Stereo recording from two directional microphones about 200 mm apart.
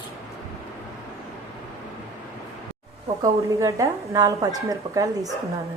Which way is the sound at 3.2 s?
15° right (ahead or behind).